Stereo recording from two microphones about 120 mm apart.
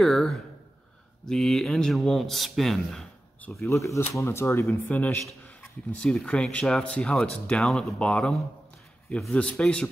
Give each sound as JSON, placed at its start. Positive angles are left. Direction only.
{"t": 0.0, "sound": "a man's voice", "side_deg": 0}
{"t": 3.6, "sound": "speech", "side_deg": 25}